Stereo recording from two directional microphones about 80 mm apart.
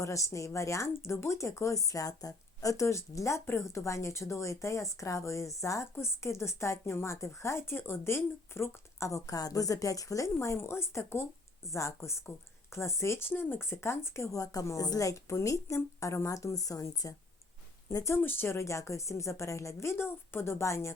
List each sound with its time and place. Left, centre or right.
0.0 s speech: left
10.3 s speech: left
18.2 s speech: left